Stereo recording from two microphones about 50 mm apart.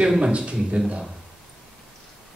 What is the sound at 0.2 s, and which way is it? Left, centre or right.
Speech, centre.